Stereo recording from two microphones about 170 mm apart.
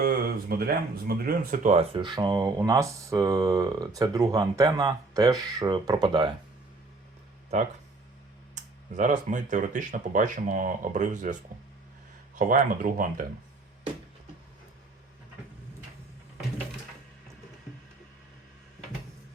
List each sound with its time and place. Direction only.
0.0 s speech: 60° right (ahead or behind)
1.7 s speech: 30° right (ahead or behind)
8.5 s speech: 50° right (ahead or behind)
12.4 s speech: 50° right (ahead or behind)